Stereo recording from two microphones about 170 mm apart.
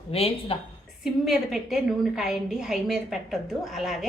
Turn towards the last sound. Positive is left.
turn(degrees=0)  # may be behind; listen again after turning